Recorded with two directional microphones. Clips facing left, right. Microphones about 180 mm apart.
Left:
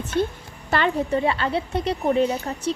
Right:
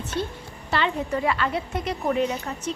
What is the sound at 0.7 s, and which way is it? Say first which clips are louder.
Speech: left 2 dB; 50° left (ahead or behind).